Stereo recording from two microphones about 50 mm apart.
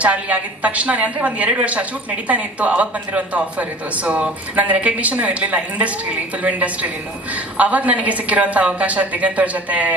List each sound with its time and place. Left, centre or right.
0.0 s a woman's voice: right
7.3 s a woman's voice: right